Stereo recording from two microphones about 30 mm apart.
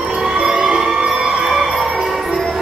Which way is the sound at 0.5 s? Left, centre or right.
Right.